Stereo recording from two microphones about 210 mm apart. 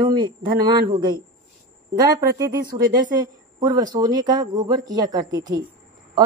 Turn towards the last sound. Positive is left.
turn(degrees=-20)  # may be behind; listen again after turning